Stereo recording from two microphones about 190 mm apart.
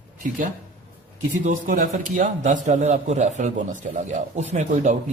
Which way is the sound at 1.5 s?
45° right (ahead or behind).